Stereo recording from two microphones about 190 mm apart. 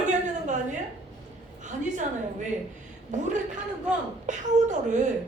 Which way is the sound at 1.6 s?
40° right (ahead or behind).